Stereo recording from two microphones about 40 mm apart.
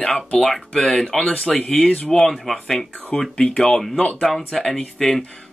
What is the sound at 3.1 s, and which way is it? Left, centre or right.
Speech, centre.